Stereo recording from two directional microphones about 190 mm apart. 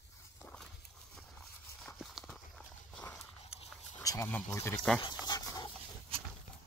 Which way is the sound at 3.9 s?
15° left (ahead or behind).